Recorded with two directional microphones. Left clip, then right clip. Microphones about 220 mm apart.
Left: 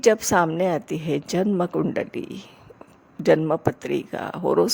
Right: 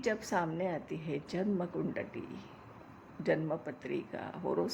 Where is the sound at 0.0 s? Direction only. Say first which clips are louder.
Left 15 dB; 45° left (ahead or behind).